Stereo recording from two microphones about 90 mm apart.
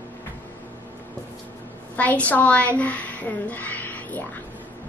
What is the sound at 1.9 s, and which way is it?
A woman's voice, 15° left (ahead or behind).